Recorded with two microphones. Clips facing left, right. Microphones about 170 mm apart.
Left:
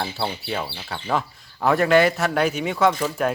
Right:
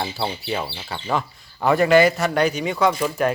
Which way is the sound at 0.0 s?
Centre (ahead or behind).